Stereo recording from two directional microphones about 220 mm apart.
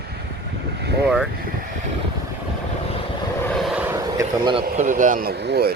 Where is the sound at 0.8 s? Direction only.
50° right (ahead or behind).